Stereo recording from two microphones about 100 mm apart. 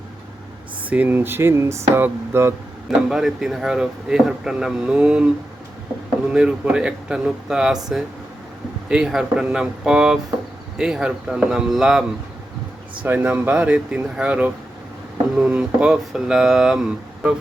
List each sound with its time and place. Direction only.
0.9 s speech: 15° right (ahead or behind)
2.9 s speech: 5° right (ahead or behind)
6.3 s speech: 10° right (ahead or behind)
8.9 s speech: 5° right (ahead or behind)
15.4 s mantra: 10° right (ahead or behind)